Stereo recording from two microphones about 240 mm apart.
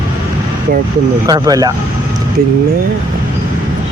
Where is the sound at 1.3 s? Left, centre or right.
Centre.